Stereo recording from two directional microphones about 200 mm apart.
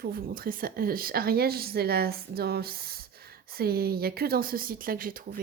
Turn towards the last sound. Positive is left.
turn(degrees=-45)  # may be behind; listen again after turning